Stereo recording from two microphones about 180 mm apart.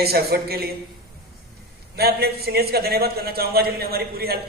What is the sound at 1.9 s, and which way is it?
A man's voice, 60° right (ahead or behind).